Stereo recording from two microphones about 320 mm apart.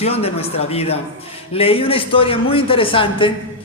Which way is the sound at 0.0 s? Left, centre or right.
Centre.